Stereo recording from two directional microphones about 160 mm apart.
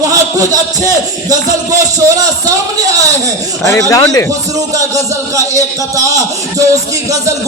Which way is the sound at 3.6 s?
20° left (ahead or behind).